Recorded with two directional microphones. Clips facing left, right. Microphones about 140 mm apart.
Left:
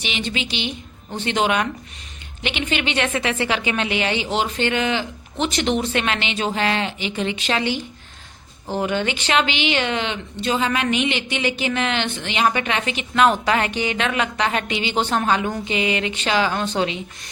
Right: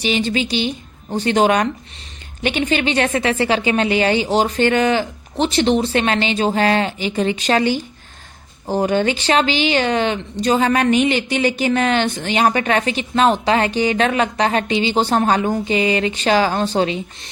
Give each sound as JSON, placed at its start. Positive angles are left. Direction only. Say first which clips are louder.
{"t": 0.0, "sound": "a woman's voice", "louder": "right 7 dB", "side_deg": -35}